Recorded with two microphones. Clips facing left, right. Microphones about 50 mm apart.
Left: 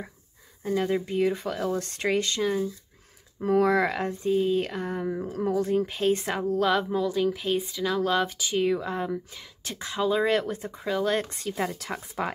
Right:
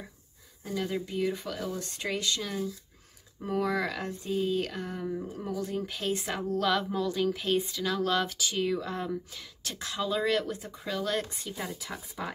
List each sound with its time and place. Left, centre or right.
0.7 s speech: left
1.8 s speech: left
2.4 s speech: left
3.3 s speech: left
5.9 s speech: left
6.5 s speech: centre
11.2 s speech: left